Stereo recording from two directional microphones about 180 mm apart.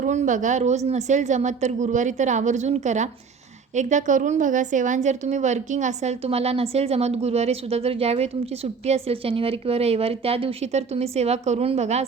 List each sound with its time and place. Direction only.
0.0 s a woman's voice: 45° right (ahead or behind)